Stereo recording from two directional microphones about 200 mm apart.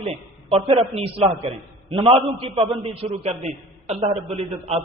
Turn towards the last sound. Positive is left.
turn(degrees=-30)  # may be behind; listen again after turning